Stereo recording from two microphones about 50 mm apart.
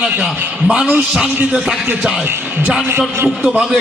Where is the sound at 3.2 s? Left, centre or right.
Right.